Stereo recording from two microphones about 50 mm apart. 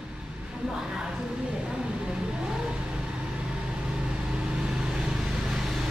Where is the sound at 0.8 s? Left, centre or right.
Centre.